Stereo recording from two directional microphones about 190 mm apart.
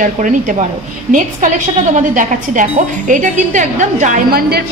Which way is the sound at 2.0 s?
40° right (ahead or behind).